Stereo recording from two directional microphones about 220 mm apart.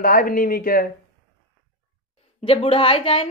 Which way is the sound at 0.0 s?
40° left (ahead or behind).